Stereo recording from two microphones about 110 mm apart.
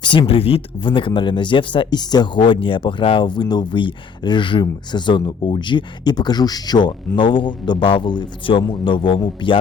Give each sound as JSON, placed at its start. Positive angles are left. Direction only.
{"t": 0.0, "sound": "speech", "side_deg": 45}